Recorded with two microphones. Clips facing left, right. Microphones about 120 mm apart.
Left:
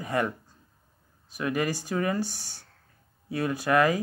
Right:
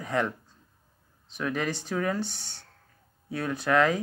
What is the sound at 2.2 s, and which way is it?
Speech, 20° right (ahead or behind).